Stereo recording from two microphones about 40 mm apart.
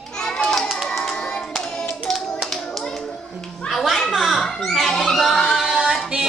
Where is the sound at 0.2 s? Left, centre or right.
Centre.